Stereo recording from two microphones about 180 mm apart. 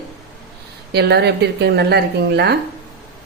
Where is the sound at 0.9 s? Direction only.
65° right (ahead or behind).